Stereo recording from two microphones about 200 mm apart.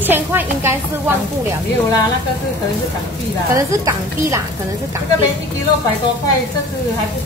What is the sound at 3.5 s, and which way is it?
Stir, 15° right (ahead or behind).